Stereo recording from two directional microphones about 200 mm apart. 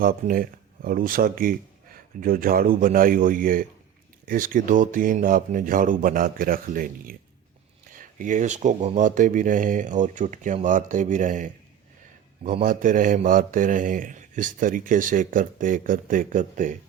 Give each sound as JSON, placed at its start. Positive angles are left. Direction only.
{"t": 0.0, "sound": "a man's voice", "side_deg": -45}